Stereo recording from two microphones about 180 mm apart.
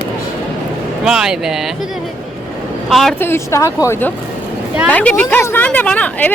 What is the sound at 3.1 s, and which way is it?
A woman's voice, 15° left (ahead or behind).